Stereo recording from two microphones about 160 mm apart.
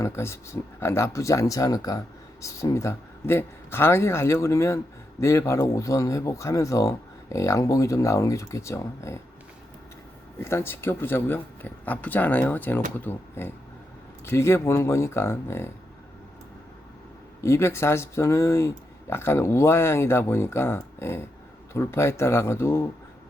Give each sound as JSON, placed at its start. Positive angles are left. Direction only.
{"t": 0.0, "sound": "speech", "side_deg": 15}
{"t": 10.4, "sound": "speech", "side_deg": 15}
{"t": 17.4, "sound": "speech", "side_deg": 15}